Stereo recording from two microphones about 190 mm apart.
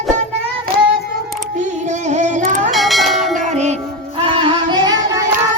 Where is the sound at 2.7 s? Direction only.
Centre (ahead or behind).